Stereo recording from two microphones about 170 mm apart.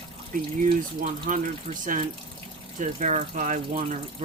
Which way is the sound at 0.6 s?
50° right (ahead or behind).